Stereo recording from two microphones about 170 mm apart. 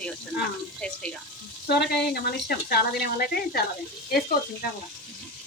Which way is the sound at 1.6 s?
70° left (ahead or behind).